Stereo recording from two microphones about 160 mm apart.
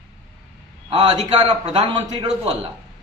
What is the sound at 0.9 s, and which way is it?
A man's voice, 35° right (ahead or behind).